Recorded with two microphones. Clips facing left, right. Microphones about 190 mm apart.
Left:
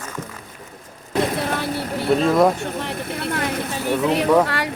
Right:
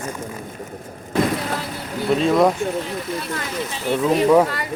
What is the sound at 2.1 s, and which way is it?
Speech, centre (ahead or behind).